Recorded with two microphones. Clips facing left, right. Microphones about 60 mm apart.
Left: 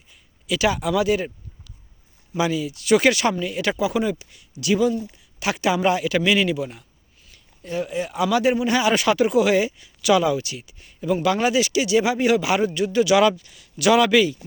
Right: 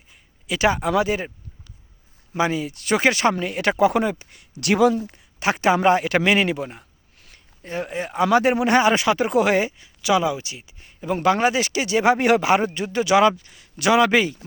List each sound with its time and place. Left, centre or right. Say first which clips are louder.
0.4 s speech: right 1 dB; right
2.9 s speech: left 1 dB; right
3.4 s speech: right 4 dB; right
5.0 s speech: right 3 dB; right
8.5 s speech: right 3 dB; right
8.8 s speech: even; right
9.3 s speech: even; right
12.5 s speech: right 1 dB; right